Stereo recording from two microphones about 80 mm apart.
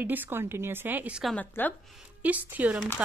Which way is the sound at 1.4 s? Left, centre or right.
Left.